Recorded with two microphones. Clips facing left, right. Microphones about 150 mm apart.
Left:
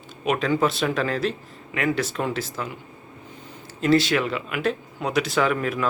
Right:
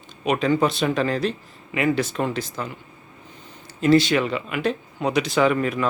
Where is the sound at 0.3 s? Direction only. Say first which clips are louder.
Right 2 dB; centre (ahead or behind).